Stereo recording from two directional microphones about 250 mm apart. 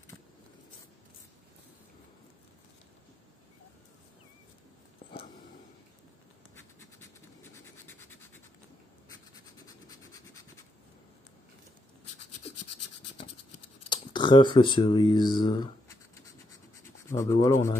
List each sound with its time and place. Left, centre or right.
7.5 s scratch: centre
9.8 s scratch: centre
13.8 s speech: centre